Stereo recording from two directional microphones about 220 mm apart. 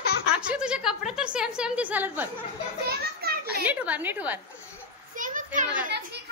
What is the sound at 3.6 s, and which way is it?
Speech, 5° right (ahead or behind).